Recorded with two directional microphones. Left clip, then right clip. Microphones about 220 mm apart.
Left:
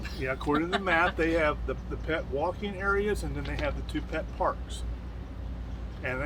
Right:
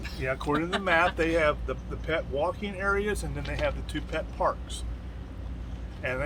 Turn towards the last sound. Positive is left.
turn(degrees=-15)  # may be behind; listen again after turning